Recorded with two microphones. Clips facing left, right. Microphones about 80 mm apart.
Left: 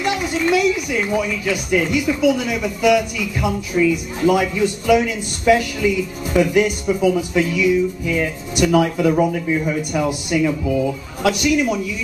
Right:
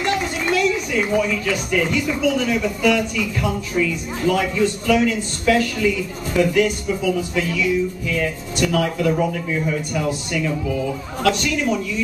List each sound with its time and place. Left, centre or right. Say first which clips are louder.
1.1 s speech: right 1 dB; centre